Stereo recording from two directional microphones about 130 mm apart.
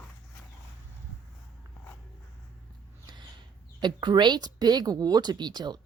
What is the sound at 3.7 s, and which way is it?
A woman's voice, 35° right (ahead or behind).